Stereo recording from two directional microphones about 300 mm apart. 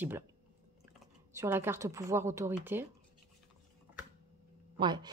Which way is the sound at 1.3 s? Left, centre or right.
Centre.